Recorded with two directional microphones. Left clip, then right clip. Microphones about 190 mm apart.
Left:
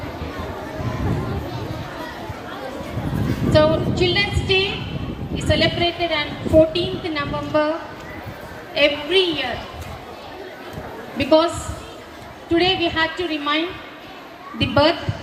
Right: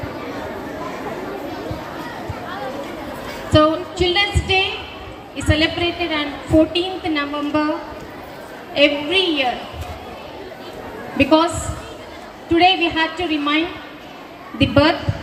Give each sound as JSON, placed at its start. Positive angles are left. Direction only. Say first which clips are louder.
{"t": 3.5, "sound": "a woman's voice", "louder": "right 1 dB", "side_deg": -50}
{"t": 8.7, "sound": "a woman's voice", "louder": "right 1 dB", "side_deg": -50}
{"t": 11.2, "sound": "a woman's voice", "louder": "right 1 dB", "side_deg": -50}
{"t": 12.5, "sound": "a woman's voice", "louder": "right 4 dB", "side_deg": -50}
{"t": 14.6, "sound": "a woman's voice", "louder": "right 2 dB", "side_deg": -50}